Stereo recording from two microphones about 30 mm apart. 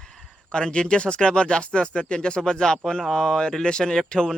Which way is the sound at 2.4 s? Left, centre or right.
Left.